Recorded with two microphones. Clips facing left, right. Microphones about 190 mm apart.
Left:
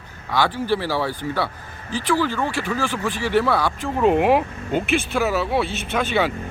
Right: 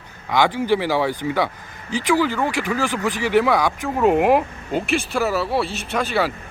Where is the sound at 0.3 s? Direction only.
20° right (ahead or behind).